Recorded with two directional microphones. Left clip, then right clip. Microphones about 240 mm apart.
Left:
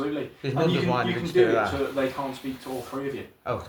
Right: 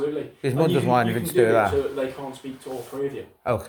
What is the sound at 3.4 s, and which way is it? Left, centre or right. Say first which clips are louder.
Speech: right 6 dB; right.